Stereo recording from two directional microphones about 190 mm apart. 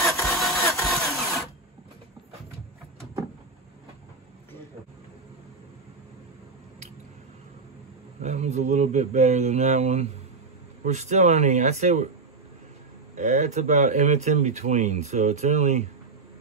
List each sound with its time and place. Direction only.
0.2 s engine: centre (ahead or behind)
0.7 s vehicle: centre (ahead or behind)
8.2 s speech: 35° right (ahead or behind)
13.1 s speech: 40° right (ahead or behind)